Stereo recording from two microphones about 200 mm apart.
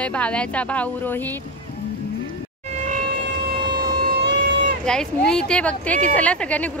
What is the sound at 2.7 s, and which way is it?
Vehicle, 35° right (ahead or behind).